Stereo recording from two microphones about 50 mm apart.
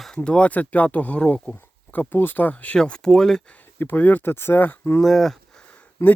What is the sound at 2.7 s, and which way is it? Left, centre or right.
Speech, centre.